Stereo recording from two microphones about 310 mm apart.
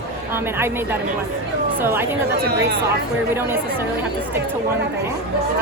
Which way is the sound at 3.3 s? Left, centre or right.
Centre.